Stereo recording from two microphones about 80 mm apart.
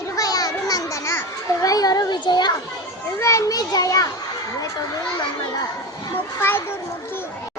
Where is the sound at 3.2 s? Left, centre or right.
Left.